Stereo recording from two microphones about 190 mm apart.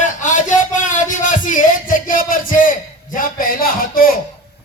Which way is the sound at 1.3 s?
45° left (ahead or behind).